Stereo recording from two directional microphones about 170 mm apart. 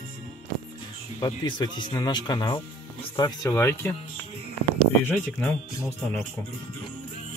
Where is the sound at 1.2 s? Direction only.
25° left (ahead or behind).